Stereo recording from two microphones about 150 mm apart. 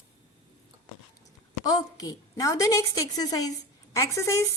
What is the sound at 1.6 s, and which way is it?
A woman's voice, 25° left (ahead or behind).